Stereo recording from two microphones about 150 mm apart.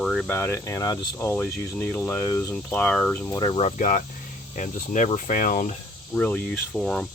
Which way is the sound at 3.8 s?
60° left (ahead or behind).